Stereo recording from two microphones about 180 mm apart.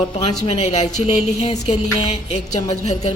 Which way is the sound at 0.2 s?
35° left (ahead or behind).